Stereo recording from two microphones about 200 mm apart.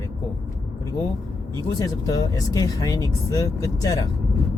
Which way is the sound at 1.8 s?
15° left (ahead or behind).